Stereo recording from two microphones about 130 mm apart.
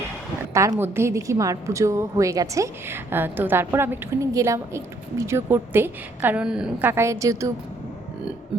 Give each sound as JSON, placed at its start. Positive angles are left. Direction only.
{"t": 0.5, "sound": "a woman's voice", "side_deg": -20}
{"t": 6.8, "sound": "a woman's voice", "side_deg": -20}